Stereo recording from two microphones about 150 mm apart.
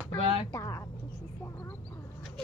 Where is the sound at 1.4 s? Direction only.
15° left (ahead or behind).